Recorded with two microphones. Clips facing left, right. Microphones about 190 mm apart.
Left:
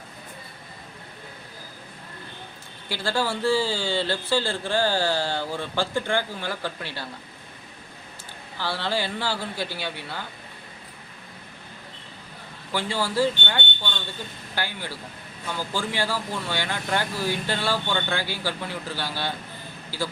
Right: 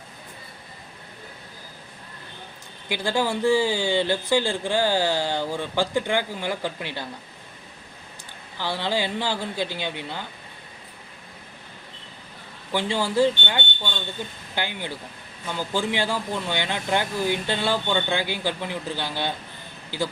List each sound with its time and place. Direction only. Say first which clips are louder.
2.9 s speech: right 2 dB; 15° right (ahead or behind)
8.5 s speech: right 2 dB; 15° right (ahead or behind)
12.7 s speech: right 3 dB; 20° right (ahead or behind)